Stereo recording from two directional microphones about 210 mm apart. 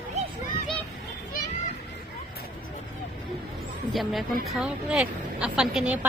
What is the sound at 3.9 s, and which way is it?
Speech, centre (ahead or behind).